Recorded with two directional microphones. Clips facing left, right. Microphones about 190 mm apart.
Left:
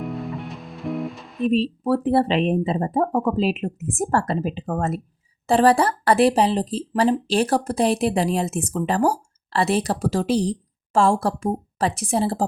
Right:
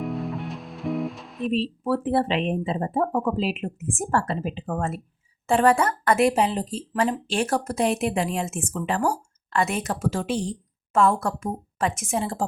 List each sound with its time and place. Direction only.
0.0 s music: centre (ahead or behind)
1.5 s speech: 40° left (ahead or behind)